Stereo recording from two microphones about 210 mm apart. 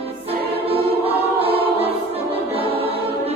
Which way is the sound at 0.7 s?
25° right (ahead or behind).